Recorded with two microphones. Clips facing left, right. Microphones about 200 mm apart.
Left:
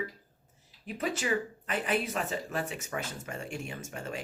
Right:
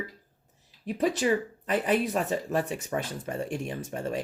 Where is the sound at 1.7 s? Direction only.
40° right (ahead or behind).